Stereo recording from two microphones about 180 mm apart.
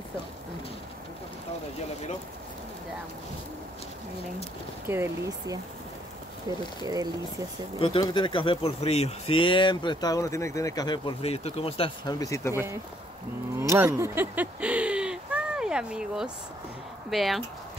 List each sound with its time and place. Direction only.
4.8 s speech: 15° right (ahead or behind)
6.8 s speech: 20° right (ahead or behind)
7.8 s speech: 30° left (ahead or behind)
13.6 s a sound: 15° right (ahead or behind)
17.1 s speech: centre (ahead or behind)